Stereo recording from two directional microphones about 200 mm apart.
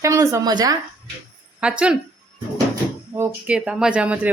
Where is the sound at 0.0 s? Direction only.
15° right (ahead or behind).